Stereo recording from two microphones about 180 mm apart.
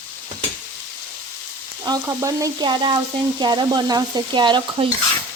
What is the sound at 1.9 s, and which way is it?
Stir, 20° right (ahead or behind).